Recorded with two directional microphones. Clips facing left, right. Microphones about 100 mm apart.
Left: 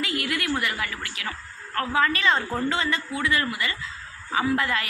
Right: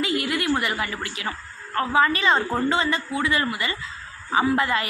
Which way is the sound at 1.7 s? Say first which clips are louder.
Right 3 dB; 15° right (ahead or behind).